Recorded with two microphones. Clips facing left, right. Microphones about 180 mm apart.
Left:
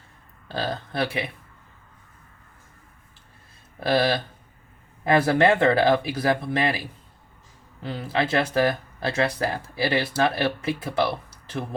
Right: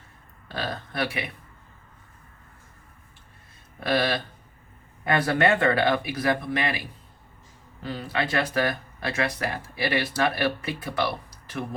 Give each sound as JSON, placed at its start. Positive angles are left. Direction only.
{"t": 0.4, "sound": "speech", "side_deg": 30}
{"t": 3.8, "sound": "speech", "side_deg": 30}
{"t": 7.9, "sound": "speech", "side_deg": 25}